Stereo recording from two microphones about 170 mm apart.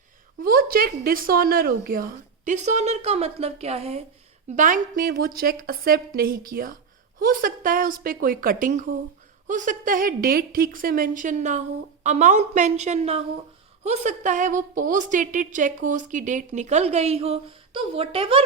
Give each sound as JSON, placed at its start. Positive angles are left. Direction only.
{"t": 0.4, "sound": "a woman's voice", "side_deg": -60}
{"t": 4.5, "sound": "a woman's voice", "side_deg": -50}